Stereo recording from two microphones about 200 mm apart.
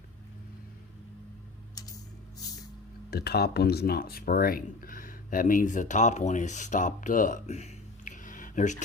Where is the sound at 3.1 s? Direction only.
55° left (ahead or behind).